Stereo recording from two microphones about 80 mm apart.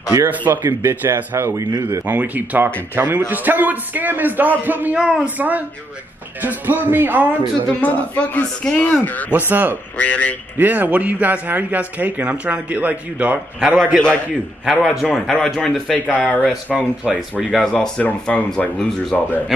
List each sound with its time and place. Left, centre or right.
0.1 s speech: right
0.7 s speech: right
2.0 s a man's voice: right
4.9 s a man's voice: centre
7.8 s a man's voice: centre
9.5 s a man's voice: right
9.9 s speech: centre
10.6 s a man's voice: right
13.9 s a man's voice: centre
16.7 s speech: centre
17.7 s speech: centre